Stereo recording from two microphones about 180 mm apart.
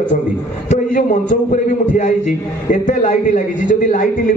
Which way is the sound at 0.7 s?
45° left (ahead or behind).